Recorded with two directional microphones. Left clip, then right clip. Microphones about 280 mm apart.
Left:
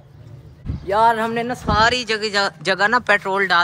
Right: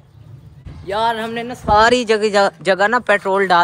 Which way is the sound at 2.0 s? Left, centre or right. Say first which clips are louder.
Right 6 dB; centre.